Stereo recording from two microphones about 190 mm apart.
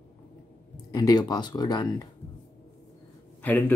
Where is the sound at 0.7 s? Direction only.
20° left (ahead or behind).